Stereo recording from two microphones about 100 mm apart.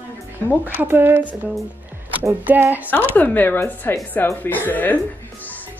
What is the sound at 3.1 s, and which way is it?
Speech, 15° left (ahead or behind).